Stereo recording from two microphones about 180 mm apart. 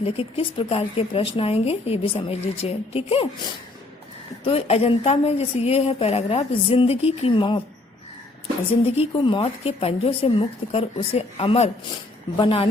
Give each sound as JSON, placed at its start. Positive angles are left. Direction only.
{"t": 0.0, "sound": "speech", "side_deg": 30}
{"t": 4.4, "sound": "speech", "side_deg": 35}
{"t": 8.8, "sound": "a woman's voice", "side_deg": 30}